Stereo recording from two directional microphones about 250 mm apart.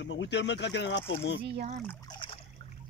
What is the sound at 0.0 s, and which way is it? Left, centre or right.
Speech, left.